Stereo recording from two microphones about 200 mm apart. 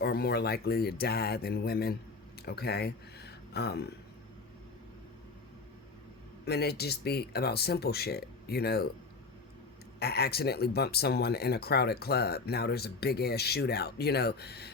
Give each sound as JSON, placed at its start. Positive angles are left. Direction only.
{"t": 0.0, "sound": "speech", "side_deg": 55}
{"t": 6.4, "sound": "speech", "side_deg": 55}
{"t": 10.0, "sound": "speech", "side_deg": 50}